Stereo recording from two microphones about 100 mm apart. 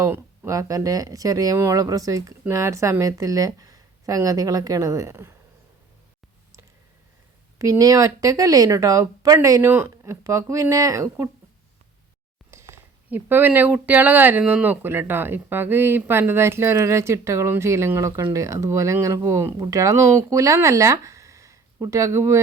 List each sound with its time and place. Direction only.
0.0 s speech: 30° right (ahead or behind)
7.6 s speech: 35° right (ahead or behind)
12.5 s a sound: 25° right (ahead or behind)
13.1 s speech: 20° right (ahead or behind)